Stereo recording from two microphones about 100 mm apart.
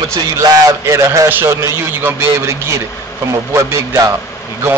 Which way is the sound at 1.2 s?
20° right (ahead or behind).